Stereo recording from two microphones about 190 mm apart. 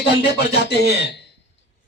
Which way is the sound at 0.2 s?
65° left (ahead or behind).